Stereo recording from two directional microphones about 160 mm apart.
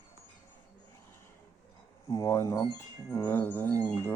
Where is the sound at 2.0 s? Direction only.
20° left (ahead or behind).